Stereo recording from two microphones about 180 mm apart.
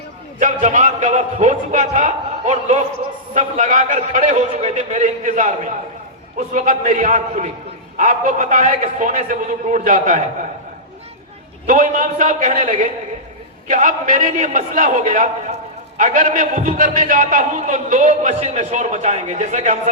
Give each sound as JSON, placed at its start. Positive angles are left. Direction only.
{"t": 0.3, "sound": "a man's voice", "side_deg": -45}
{"t": 11.6, "sound": "a man's voice", "side_deg": -50}